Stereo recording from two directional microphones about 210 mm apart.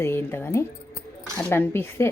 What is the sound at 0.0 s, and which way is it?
Speech, 10° left (ahead or behind).